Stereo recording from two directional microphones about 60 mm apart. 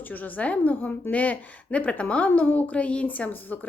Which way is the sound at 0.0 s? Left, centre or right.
Left.